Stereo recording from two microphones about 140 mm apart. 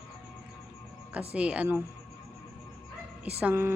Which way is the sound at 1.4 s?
10° right (ahead or behind).